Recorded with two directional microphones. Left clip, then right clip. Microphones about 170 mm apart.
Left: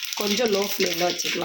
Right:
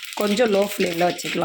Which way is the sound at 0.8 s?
45° right (ahead or behind).